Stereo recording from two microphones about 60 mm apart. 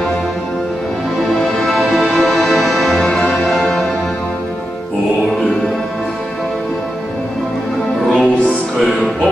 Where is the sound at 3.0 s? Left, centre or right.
Centre.